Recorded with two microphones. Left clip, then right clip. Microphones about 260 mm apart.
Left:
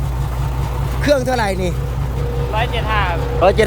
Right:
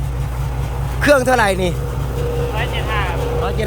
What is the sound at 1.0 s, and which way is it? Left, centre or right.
Speech, centre.